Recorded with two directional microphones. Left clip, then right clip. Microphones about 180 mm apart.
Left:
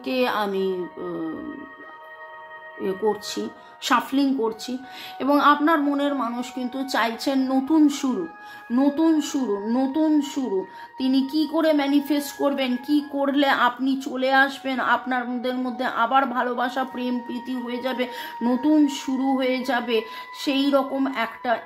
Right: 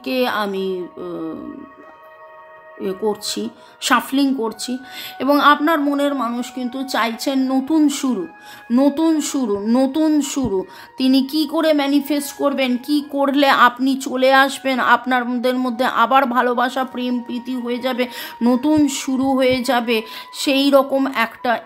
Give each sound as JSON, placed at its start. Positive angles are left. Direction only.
{"t": 0.0, "sound": "a woman's voice", "side_deg": -20}
{"t": 2.8, "sound": "a woman's voice", "side_deg": -25}
{"t": 8.7, "sound": "speech", "side_deg": -40}